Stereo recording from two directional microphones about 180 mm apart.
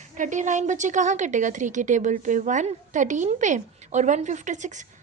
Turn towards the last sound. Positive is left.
turn(degrees=-40)  # may be behind; listen again after turning